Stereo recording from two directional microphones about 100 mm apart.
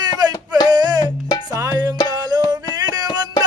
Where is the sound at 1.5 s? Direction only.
35° right (ahead or behind).